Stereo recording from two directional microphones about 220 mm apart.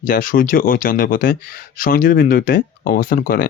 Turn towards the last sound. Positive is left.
turn(degrees=40)  # may be behind; listen again after turning